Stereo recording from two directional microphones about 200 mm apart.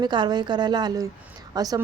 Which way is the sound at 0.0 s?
20° right (ahead or behind).